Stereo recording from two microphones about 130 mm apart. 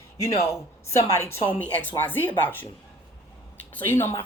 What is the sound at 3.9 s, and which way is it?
Speech, 20° left (ahead or behind).